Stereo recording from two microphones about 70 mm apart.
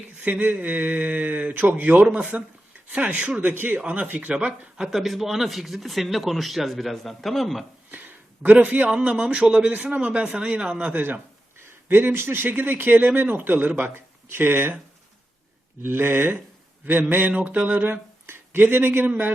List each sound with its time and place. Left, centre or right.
0.3 s speech: right
4.8 s speech: centre
7.9 s a sound: right
8.4 s speech: right
15.8 s speech: right